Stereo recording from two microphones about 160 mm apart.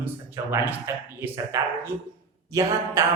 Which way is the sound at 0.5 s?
10° right (ahead or behind).